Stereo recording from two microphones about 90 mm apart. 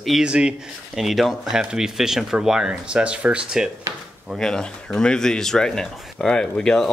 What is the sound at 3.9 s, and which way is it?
Speech, 40° right (ahead or behind).